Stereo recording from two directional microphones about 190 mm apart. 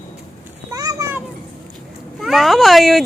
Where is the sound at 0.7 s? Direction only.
15° right (ahead or behind).